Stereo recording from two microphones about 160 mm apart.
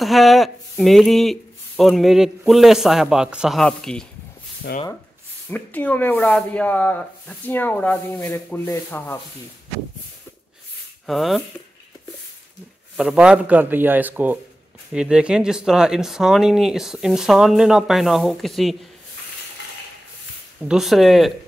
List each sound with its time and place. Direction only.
0.0 s speech: centre (ahead or behind)
4.7 s speech: 90° left
5.5 s speech: 10° left (ahead or behind)
11.1 s speech: centre (ahead or behind)
12.9 s speech: 5° right (ahead or behind)
20.6 s speech: centre (ahead or behind)